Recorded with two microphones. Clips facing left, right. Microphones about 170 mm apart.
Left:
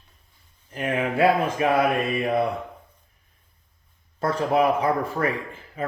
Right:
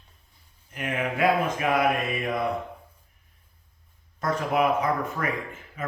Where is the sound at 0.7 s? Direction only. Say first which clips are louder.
Left 4 dB; 35° left (ahead or behind).